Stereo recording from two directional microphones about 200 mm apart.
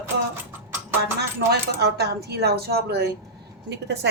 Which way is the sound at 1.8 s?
55° right (ahead or behind).